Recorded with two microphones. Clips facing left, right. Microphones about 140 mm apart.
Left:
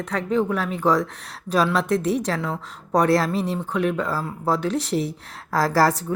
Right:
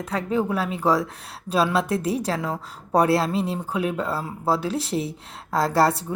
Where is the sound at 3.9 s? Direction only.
30° right (ahead or behind).